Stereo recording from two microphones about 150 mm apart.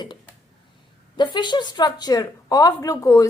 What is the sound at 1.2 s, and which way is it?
A woman's voice, 30° left (ahead or behind).